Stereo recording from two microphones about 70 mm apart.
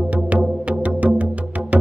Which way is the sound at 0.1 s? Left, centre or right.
Centre.